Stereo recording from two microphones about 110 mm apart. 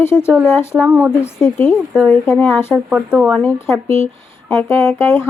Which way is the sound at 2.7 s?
10° right (ahead or behind).